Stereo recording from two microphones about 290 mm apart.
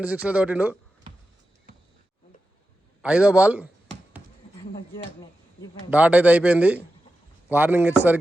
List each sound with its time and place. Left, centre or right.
0.0 s a man's voice: centre
3.0 s a man's voice: centre
5.9 s a man's voice: centre